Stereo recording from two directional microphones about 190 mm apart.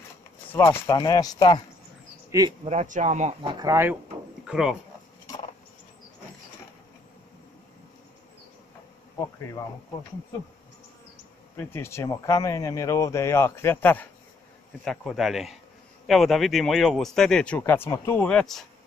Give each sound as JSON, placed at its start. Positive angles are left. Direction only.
{"t": 0.5, "sound": "speech", "side_deg": 10}
{"t": 2.3, "sound": "speech", "side_deg": -20}
{"t": 2.7, "sound": "speech", "side_deg": -40}
{"t": 3.5, "sound": "speech", "side_deg": -15}
{"t": 4.5, "sound": "speech", "side_deg": -5}
{"t": 11.5, "sound": "speech", "side_deg": 10}
{"t": 14.9, "sound": "speech", "side_deg": 0}